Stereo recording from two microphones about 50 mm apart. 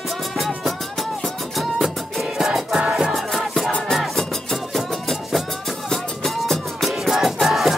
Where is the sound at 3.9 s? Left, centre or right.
Centre.